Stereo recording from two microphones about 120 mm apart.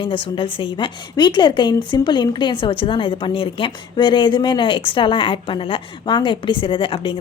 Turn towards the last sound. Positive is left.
turn(degrees=45)  # may be behind; listen again after turning